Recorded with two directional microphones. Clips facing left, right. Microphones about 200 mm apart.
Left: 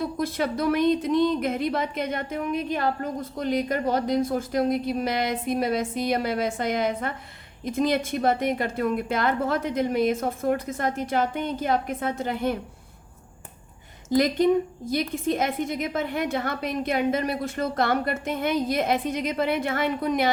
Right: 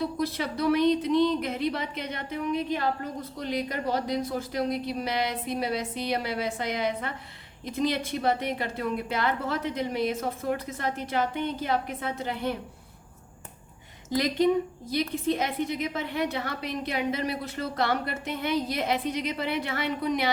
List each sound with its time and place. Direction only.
0.0 s speech: 50° left (ahead or behind)
14.8 s speech: 45° left (ahead or behind)